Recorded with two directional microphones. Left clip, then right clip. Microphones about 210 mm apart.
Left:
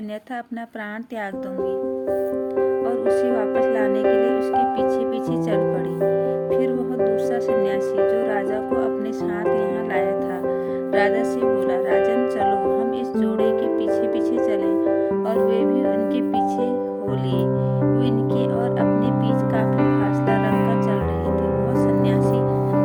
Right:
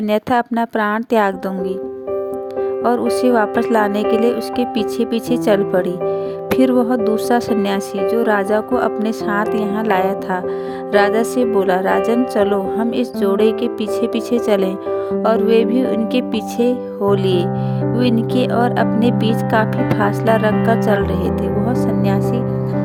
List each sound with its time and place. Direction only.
0.1 s speech: 50° right (ahead or behind)
2.8 s speech: 50° right (ahead or behind)
6.6 s speech: 50° right (ahead or behind)